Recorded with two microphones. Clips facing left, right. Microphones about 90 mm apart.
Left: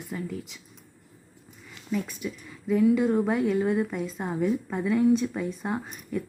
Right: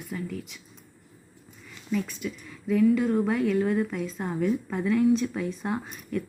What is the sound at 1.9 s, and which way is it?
A woman's voice, 15° left (ahead or behind).